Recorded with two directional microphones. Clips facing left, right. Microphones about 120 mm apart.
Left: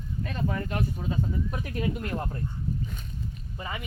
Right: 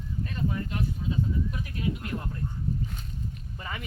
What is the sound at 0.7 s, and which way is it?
Speech, 50° left (ahead or behind).